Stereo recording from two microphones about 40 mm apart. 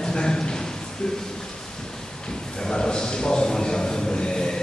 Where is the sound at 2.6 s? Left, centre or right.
Centre.